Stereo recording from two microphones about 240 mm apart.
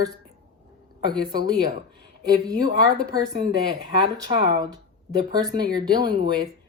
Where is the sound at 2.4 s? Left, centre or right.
Centre.